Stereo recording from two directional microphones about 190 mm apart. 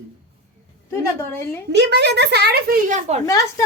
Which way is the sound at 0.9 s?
15° left (ahead or behind).